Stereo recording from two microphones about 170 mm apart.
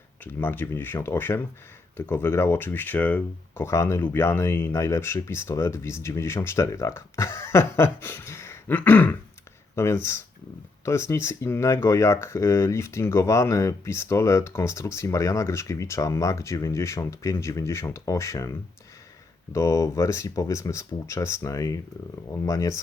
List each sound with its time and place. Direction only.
0.3 s speech: 10° left (ahead or behind)
19.5 s speech: 15° left (ahead or behind)